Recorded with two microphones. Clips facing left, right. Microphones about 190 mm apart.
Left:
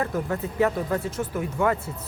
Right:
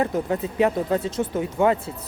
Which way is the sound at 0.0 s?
20° right (ahead or behind).